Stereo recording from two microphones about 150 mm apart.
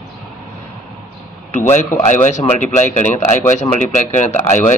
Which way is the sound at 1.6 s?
50° left (ahead or behind).